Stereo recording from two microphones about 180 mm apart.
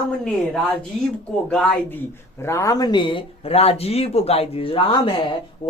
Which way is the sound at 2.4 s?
15° left (ahead or behind).